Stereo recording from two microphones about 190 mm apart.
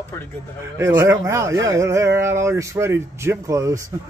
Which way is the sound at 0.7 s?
15° right (ahead or behind).